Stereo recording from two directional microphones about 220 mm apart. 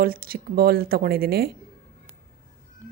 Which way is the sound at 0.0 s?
40° right (ahead or behind).